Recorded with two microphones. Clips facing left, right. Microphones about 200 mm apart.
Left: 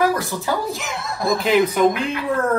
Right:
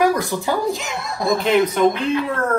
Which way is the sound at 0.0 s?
15° right (ahead or behind).